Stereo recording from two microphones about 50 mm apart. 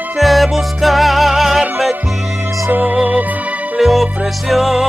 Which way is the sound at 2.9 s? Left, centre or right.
Right.